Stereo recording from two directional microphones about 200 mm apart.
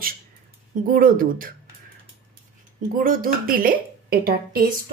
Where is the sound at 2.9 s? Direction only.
45° right (ahead or behind).